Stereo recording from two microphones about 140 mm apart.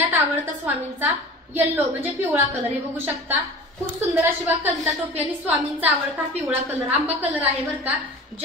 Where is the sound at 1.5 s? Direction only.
15° right (ahead or behind).